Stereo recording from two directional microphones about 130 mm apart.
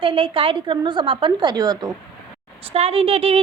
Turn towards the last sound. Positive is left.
turn(degrees=-50)  # may be behind; listen again after turning